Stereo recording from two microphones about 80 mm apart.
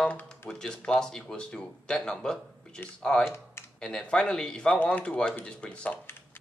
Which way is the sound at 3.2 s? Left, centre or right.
Left.